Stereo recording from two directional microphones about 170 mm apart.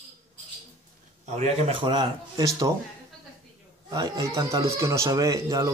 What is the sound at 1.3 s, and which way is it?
Speech, 35° right (ahead or behind).